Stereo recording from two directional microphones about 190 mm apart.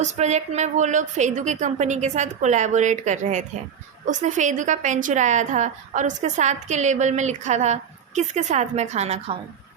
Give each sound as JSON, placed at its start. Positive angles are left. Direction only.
{"t": 0.0, "sound": "a woman's voice", "side_deg": -35}